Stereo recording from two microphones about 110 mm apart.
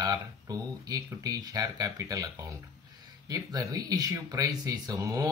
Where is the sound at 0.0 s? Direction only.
35° right (ahead or behind).